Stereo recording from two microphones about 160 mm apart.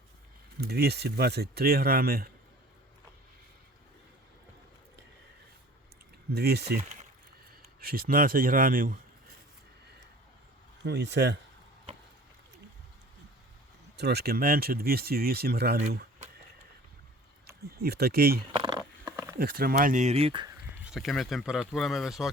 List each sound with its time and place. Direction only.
0.7 s speech: 85° right; by 2.3 s 70° right (ahead or behind)
6.3 s speech: 85° right
6.8 s a sound: 45° right (ahead or behind)
7.8 s a man's voice: 65° right (ahead or behind)
10.8 s speech: 90° right
13.9 s speech: 90° right
17.4 s speech: 80° right
18.5 s a sound: 25° right (ahead or behind)
19.4 s speech: 65° right (ahead or behind); by 20.5 s 35° right (ahead or behind)
20.8 s speech: centre (ahead or behind)